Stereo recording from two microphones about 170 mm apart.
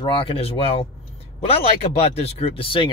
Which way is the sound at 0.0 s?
30° left (ahead or behind).